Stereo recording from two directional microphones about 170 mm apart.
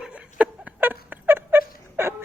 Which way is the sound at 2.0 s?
15° right (ahead or behind).